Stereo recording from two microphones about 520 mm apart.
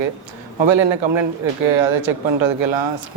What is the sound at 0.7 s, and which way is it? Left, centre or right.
Speech, right.